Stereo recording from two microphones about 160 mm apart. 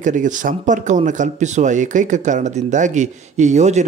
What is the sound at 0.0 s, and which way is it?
Speech, 50° right (ahead or behind).